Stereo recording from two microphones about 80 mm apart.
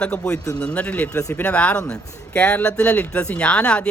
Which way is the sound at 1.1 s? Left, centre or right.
Left.